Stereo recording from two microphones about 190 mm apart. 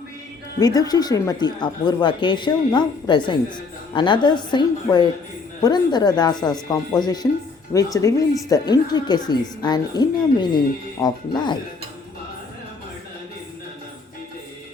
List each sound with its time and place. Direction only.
0.6 s speech: 20° left (ahead or behind)